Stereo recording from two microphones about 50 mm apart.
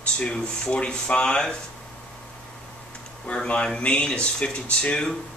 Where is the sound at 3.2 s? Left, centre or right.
Left.